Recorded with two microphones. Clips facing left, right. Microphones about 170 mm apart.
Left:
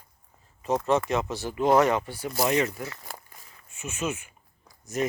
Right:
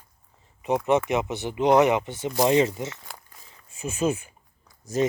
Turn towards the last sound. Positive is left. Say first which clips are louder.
# right 4 dB
turn(degrees=-30)  # may be behind; listen again after turning